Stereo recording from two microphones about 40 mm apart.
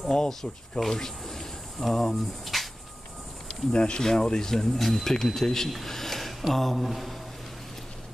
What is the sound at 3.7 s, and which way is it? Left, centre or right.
Speech, left.